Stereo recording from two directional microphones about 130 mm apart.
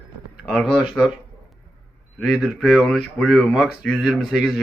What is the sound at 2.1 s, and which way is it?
Speech, centre (ahead or behind).